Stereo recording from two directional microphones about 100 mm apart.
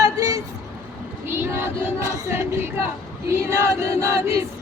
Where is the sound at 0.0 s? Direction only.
35° right (ahead or behind).